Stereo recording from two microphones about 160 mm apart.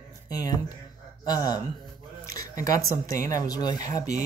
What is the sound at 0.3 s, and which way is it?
Speech, 25° left (ahead or behind).